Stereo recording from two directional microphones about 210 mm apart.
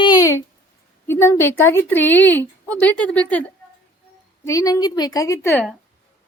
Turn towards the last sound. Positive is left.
turn(degrees=15)  # may be behind; listen again after turning